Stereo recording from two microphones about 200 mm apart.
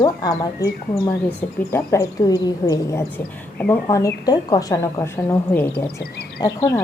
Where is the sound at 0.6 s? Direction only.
15° left (ahead or behind).